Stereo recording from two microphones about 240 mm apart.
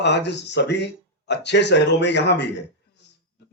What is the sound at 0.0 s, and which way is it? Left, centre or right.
Speech, left.